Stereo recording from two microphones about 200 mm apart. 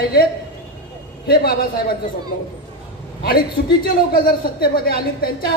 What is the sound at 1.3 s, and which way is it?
Speech, 50° left (ahead or behind).